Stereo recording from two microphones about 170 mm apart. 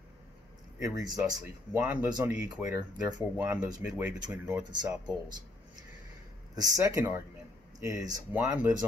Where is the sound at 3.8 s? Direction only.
10° right (ahead or behind).